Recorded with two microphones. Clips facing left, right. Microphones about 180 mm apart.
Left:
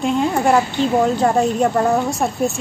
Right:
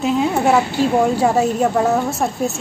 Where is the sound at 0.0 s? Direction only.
5° right (ahead or behind).